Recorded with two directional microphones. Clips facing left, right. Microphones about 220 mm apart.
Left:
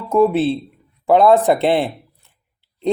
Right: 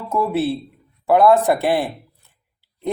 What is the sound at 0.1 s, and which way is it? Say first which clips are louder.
Speech: left 6 dB; 20° left (ahead or behind).